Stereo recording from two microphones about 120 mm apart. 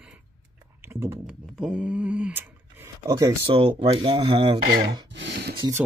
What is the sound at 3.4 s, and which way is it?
Speech, 50° right (ahead or behind).